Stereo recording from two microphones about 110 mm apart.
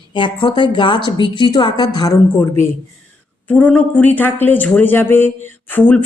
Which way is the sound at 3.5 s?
15° left (ahead or behind).